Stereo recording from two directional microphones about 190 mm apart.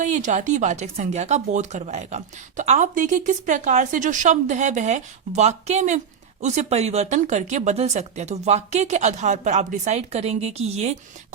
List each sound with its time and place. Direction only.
0.0 s speech: 40° right (ahead or behind)